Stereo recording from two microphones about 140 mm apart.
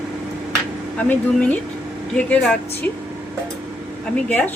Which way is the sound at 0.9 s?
10° left (ahead or behind).